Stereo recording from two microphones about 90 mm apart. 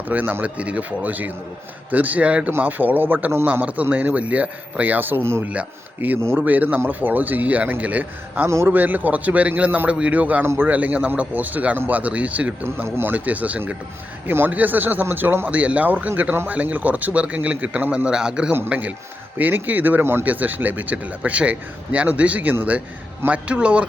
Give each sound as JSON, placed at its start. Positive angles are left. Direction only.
{"t": 0.1, "sound": "a man's voice", "side_deg": -20}
{"t": 5.5, "sound": "a man's voice", "side_deg": -15}
{"t": 8.4, "sound": "a man's voice", "side_deg": -25}